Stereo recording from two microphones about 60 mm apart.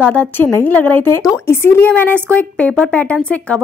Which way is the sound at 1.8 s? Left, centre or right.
Left.